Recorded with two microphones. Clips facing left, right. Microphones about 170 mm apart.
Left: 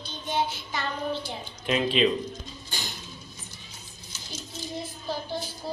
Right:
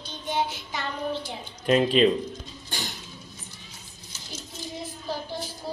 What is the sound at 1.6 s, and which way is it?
Speech, 45° right (ahead or behind).